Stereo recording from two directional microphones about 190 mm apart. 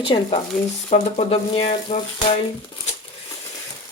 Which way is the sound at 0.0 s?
30° left (ahead or behind).